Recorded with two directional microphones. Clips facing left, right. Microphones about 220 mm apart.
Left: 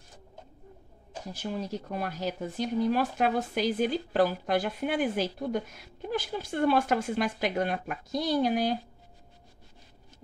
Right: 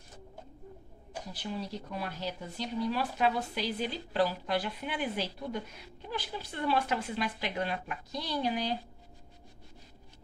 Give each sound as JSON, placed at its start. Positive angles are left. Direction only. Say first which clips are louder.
{"t": 1.3, "sound": "speech", "louder": "left 5 dB", "side_deg": 45}